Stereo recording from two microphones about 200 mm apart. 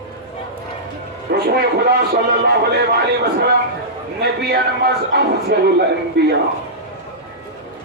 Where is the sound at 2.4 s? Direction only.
55° right (ahead or behind).